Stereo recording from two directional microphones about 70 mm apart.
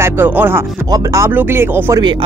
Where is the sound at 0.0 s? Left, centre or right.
Right.